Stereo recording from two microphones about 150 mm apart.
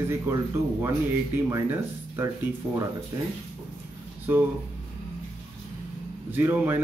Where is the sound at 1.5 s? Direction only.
20° right (ahead or behind).